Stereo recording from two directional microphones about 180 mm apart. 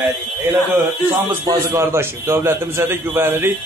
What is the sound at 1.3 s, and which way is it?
A man's voice, 15° right (ahead or behind).